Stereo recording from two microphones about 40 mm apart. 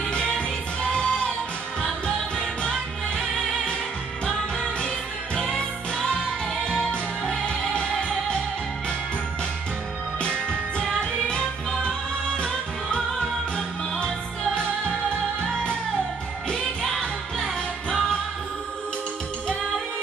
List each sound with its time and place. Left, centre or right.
0.1 s music: left
4.7 s music: left
6.6 s music: left
10.8 s music: left
17.0 s music: centre